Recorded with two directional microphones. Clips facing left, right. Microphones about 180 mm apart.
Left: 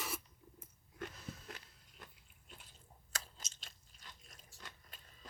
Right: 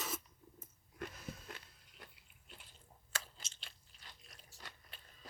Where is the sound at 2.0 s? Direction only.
45° left (ahead or behind).